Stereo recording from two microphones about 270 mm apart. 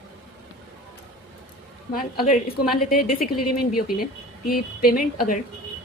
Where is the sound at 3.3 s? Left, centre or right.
Left.